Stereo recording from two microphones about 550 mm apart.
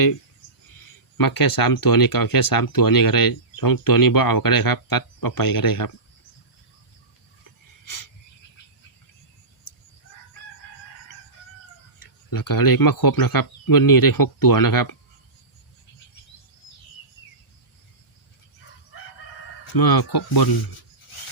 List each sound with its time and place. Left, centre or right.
1.1 s speech: left
11.9 s speech: left
19.7 s speech: left
21.1 s a sound: left